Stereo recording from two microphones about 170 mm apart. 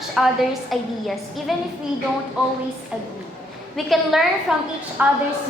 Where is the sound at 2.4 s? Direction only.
5° right (ahead or behind).